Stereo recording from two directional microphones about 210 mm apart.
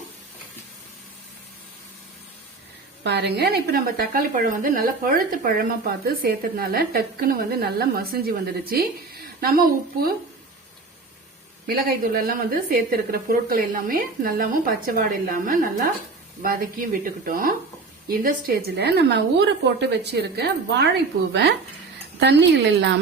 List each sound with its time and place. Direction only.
3.0 s speech: 50° right (ahead or behind)
11.6 s speech: 45° right (ahead or behind)
22.2 s a woman's voice: 55° right (ahead or behind)